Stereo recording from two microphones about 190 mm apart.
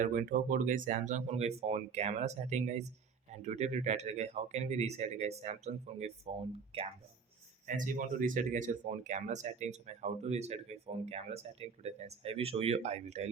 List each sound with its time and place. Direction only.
0.0 s speech: 45° right (ahead or behind)
7.7 s speech: 45° right (ahead or behind)